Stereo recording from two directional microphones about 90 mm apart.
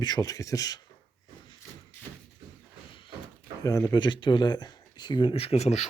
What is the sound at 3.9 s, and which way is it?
Speech, 60° left (ahead or behind).